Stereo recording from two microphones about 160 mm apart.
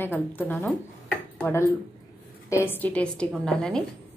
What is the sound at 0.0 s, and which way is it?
A woman's voice, 10° left (ahead or behind).